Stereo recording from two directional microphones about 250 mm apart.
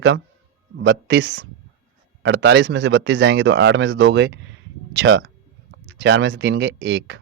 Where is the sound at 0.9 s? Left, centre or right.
Right.